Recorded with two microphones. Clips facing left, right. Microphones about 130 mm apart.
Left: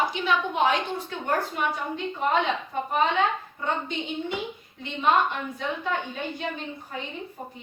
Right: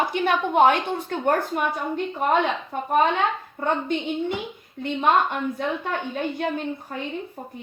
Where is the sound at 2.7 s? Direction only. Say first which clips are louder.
Even; 50° right (ahead or behind).